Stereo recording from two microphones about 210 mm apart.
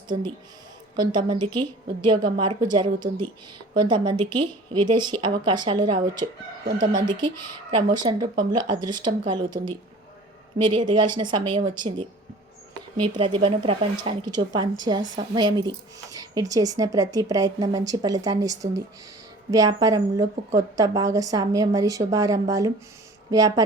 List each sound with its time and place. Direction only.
0.9 s speech: 20° right (ahead or behind)
6.7 s speech: 40° right (ahead or behind)
7.1 s speech: 20° right (ahead or behind)
13.1 s a woman's voice: 25° right (ahead or behind)